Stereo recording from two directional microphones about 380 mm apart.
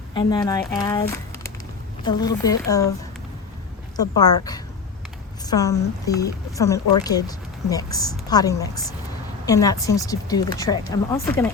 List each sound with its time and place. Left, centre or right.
0.1 s a woman's voice: centre
3.9 s a woman's voice: centre